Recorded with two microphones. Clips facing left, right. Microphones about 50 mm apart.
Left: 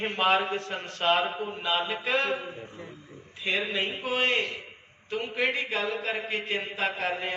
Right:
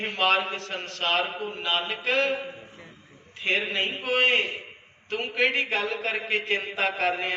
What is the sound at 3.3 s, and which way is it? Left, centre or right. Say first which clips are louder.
Speech: right 2 dB; right.